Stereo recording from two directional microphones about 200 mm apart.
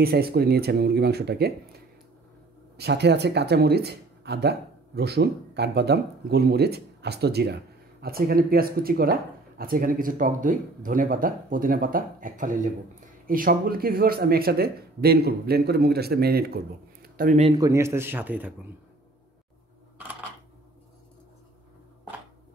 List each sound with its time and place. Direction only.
0.0 s speech: 50° right (ahead or behind)
2.8 s speech: 55° right (ahead or behind)
17.0 s a sound: 45° right (ahead or behind)
17.6 s speech: 15° right (ahead or behind)